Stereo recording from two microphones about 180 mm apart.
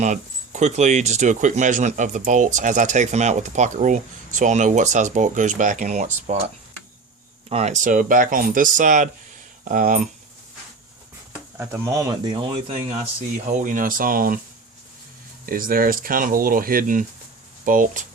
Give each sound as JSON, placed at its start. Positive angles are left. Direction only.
{"t": 0.0, "sound": "speech", "side_deg": -40}
{"t": 7.5, "sound": "speech", "side_deg": -40}
{"t": 11.5, "sound": "speech", "side_deg": -10}
{"t": 15.4, "sound": "speech", "side_deg": -50}